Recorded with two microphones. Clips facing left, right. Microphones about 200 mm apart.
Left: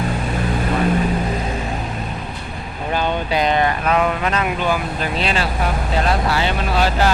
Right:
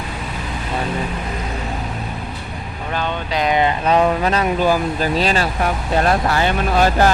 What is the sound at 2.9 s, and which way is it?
Vehicle, 10° left (ahead or behind).